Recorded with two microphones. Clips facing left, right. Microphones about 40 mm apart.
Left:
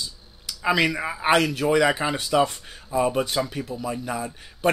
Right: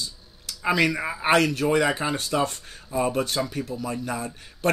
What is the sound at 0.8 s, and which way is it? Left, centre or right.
Speech, centre.